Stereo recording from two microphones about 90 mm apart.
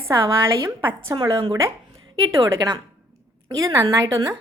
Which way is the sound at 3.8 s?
45° right (ahead or behind).